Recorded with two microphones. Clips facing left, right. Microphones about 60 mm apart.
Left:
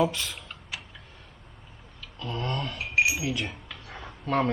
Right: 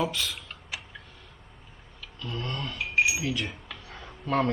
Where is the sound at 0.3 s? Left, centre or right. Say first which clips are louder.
Right 1 dB; centre.